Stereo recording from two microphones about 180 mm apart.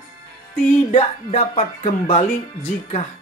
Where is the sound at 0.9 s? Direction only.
40° left (ahead or behind).